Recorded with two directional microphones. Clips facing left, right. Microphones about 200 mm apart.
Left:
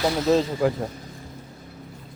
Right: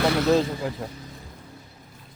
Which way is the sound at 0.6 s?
75° left (ahead or behind).